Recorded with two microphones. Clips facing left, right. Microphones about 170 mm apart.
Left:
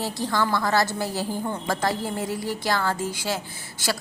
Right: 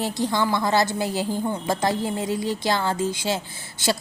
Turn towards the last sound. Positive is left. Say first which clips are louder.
# right 4 dB
turn(degrees=-25)  # may be behind; listen again after turning